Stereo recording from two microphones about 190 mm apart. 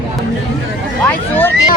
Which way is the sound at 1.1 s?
10° left (ahead or behind).